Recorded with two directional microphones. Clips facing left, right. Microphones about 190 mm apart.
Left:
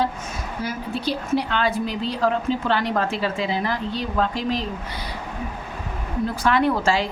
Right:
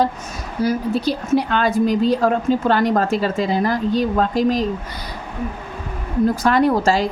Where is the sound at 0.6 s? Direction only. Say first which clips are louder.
Right 9 dB; 40° right (ahead or behind).